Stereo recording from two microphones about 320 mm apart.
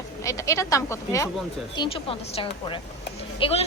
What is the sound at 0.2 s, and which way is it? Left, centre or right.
A woman's voice, centre.